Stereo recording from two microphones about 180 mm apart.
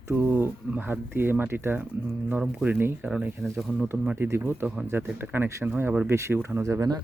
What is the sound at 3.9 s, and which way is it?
Speech, 10° right (ahead or behind).